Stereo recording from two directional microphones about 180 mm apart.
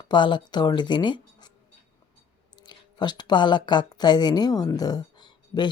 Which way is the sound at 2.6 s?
25° left (ahead or behind).